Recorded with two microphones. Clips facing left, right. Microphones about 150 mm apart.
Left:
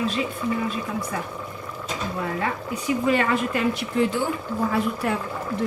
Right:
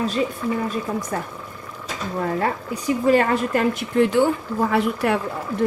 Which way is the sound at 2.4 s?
40° right (ahead or behind).